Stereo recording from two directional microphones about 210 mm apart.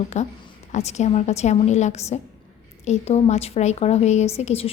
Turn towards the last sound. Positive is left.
turn(degrees=30)  # may be behind; listen again after turning